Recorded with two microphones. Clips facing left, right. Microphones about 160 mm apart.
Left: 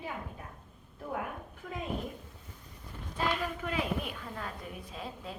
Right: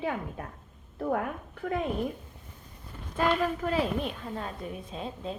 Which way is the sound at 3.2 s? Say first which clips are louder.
Right 7 dB; 40° right (ahead or behind).